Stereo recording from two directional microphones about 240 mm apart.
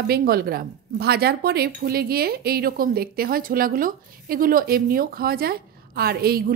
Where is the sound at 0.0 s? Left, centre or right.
Right.